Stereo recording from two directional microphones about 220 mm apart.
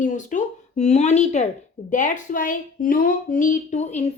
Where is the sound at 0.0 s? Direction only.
35° left (ahead or behind).